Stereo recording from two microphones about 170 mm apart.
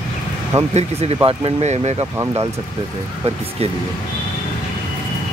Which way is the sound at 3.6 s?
35° right (ahead or behind).